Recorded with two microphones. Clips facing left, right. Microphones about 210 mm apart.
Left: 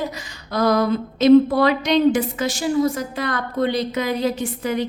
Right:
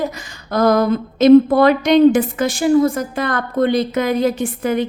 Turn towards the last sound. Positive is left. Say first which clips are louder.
# right 4 dB
turn(degrees=-55)  # may be behind; listen again after turning